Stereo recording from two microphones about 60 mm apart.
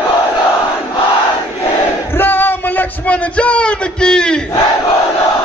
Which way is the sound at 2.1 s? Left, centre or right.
Left.